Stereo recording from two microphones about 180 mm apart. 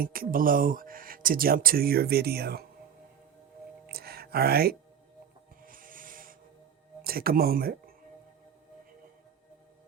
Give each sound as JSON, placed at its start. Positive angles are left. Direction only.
{"t": 0.0, "sound": "speech", "side_deg": -55}
{"t": 3.8, "sound": "music", "side_deg": -60}
{"t": 7.0, "sound": "speech", "side_deg": -55}